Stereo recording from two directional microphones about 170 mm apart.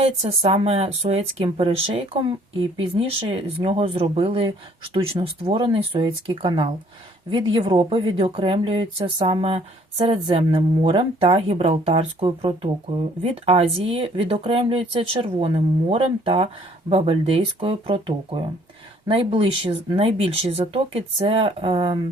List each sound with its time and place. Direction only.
0.2 s speech: 35° right (ahead or behind)
10.2 s speech: 30° right (ahead or behind)